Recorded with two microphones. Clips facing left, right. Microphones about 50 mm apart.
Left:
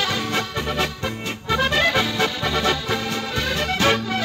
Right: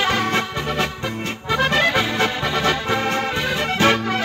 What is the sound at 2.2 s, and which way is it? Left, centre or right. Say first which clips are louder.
Music: right 2 dB; right.